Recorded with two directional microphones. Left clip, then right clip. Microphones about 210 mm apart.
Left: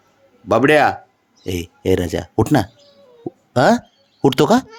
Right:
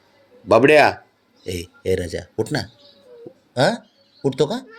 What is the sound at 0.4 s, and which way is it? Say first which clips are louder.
Speech: right 1 dB; 20° left (ahead or behind).